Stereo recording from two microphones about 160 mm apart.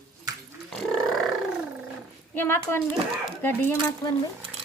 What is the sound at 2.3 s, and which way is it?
A woman's voice, 15° left (ahead or behind).